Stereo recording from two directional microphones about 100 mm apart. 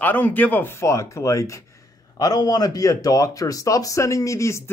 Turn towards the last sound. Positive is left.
turn(degrees=30)  # may be behind; listen again after turning